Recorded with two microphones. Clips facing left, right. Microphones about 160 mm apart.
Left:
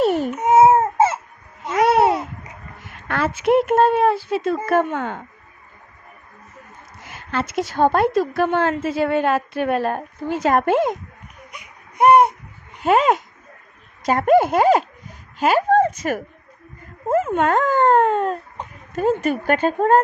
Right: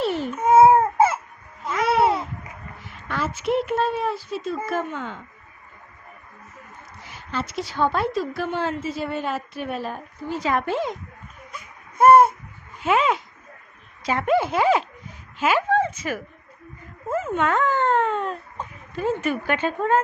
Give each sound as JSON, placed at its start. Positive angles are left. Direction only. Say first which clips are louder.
{"t": 0.0, "sound": "babbling", "louder": "left 6 dB", "side_deg": 45}
{"t": 0.3, "sound": "babbling", "louder": "right 1 dB", "side_deg": 20}
{"t": 1.7, "sound": "babbling", "louder": "left 5 dB", "side_deg": 45}
{"t": 2.8, "sound": "a woman's voice", "louder": "left 5 dB", "side_deg": 60}
{"t": 7.0, "sound": "a woman's voice", "louder": "left 5 dB", "side_deg": 55}
{"t": 10.4, "sound": "speech", "louder": "left 7 dB", "side_deg": 50}
{"t": 11.5, "sound": "baby cry", "louder": "left 1 dB", "side_deg": 20}
{"t": 12.8, "sound": "speech", "louder": "left 4 dB", "side_deg": 40}
{"t": 17.1, "sound": "speech", "louder": "left 5 dB", "side_deg": 55}